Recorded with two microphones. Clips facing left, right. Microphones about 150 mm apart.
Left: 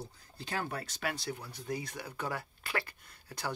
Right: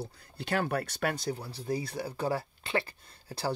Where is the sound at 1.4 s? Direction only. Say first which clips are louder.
Right 5 dB; 30° right (ahead or behind).